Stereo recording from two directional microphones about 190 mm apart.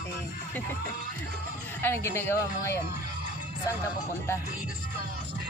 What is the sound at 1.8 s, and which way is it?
Speech, 10° left (ahead or behind).